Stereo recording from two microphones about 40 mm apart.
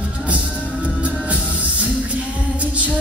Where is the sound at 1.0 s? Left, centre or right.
Right.